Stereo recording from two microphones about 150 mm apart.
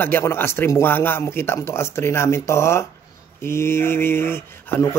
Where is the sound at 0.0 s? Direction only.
15° left (ahead or behind).